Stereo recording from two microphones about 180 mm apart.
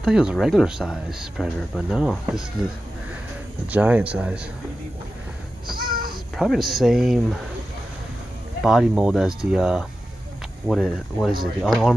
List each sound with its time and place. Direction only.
0.0 s speech: 5° right (ahead or behind)
3.7 s speech: 10° right (ahead or behind)
5.8 s a sound: 55° right (ahead or behind)
6.3 s speech: centre (ahead or behind)
8.6 s speech: 5° right (ahead or behind)